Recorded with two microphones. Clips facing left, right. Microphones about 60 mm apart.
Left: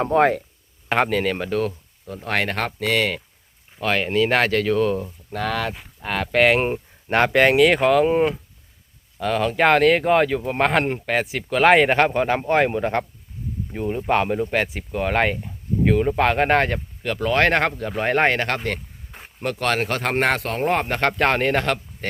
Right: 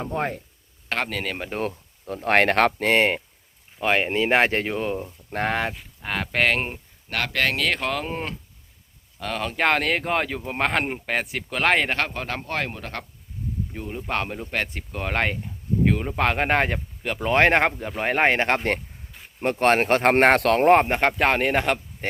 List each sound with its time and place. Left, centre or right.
0.0 s speech: left
0.9 s speech: centre
2.2 s speech: right
3.8 s speech: right
5.3 s speech: right
6.0 s speech: centre
6.7 s speech: left
13.7 s speech: centre
18.3 s speech: right
20.8 s speech: centre
21.1 s speech: centre